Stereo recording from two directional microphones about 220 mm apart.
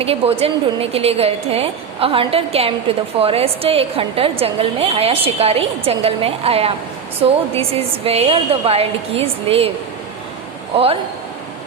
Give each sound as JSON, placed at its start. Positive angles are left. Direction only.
{"t": 0.0, "sound": "a woman's voice", "side_deg": -25}